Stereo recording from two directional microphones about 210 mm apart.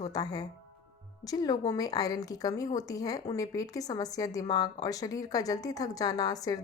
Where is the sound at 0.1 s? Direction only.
20° left (ahead or behind).